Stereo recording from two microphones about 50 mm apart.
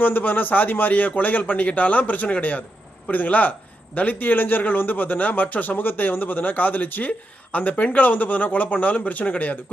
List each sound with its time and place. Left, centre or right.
0.0 s a man's voice: left